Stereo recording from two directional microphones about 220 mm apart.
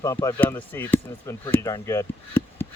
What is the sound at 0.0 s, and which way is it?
Speech, 15° left (ahead or behind).